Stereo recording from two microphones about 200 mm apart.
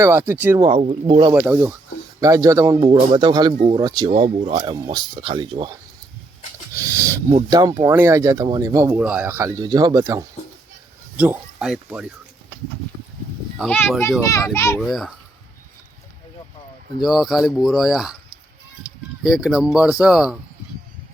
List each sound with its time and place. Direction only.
0.0 s speech: 10° right (ahead or behind)
0.6 s speech: 30° right (ahead or behind)
1.3 s speech: 15° right (ahead or behind)
4.1 s speech: 35° right (ahead or behind)
6.7 s a sound: 15° right (ahead or behind)
7.3 s speech: 25° right (ahead or behind); by 12.1 s 5° right (ahead or behind)
13.6 s speech: 5° left (ahead or behind)
14.2 s a child's voice: 15° left (ahead or behind)
14.8 s speech: centre (ahead or behind)
17.0 s speech: centre (ahead or behind)
19.2 s speech: 5° right (ahead or behind)